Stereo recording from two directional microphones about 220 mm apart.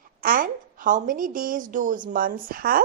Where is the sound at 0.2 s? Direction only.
40° right (ahead or behind).